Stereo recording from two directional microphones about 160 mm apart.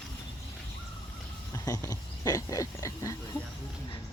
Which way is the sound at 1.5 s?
20° left (ahead or behind).